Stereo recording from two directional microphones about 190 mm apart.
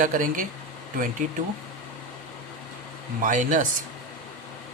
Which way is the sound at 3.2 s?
45° right (ahead or behind).